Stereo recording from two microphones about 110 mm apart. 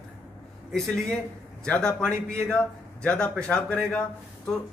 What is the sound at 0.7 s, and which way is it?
A man's voice, 5° left (ahead or behind).